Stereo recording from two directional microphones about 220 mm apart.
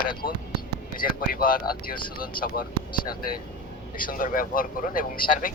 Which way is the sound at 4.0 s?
40° left (ahead or behind).